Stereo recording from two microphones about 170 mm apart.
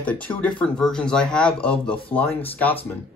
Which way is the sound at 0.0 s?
10° left (ahead or behind).